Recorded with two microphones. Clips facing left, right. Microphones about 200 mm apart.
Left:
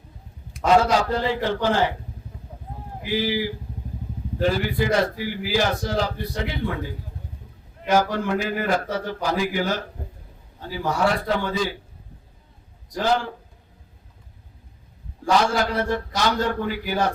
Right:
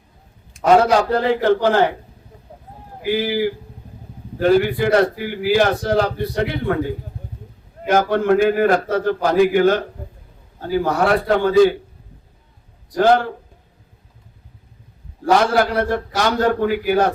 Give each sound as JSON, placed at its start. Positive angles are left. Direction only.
{"t": 0.8, "sound": "a man's voice", "side_deg": -55}
{"t": 3.1, "sound": "a man's voice", "side_deg": -55}
{"t": 13.0, "sound": "a man's voice", "side_deg": -55}
{"t": 15.4, "sound": "a man's voice", "side_deg": -55}